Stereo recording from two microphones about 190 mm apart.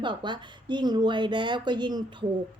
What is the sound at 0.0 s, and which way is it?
Speech, 25° right (ahead or behind).